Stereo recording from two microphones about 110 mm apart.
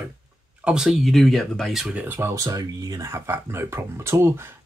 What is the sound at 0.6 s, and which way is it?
Speech, 10° right (ahead or behind).